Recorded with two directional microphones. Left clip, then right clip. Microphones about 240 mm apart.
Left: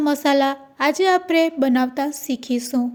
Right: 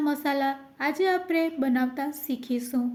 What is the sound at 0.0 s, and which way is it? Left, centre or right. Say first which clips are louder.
A woman's voice: left 8 dB; left.